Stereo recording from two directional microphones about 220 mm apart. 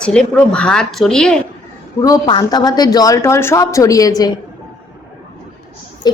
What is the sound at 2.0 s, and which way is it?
Speech, 20° left (ahead or behind).